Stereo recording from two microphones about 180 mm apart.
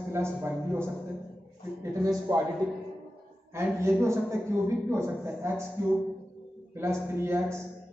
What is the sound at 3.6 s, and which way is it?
Speech, 15° right (ahead or behind).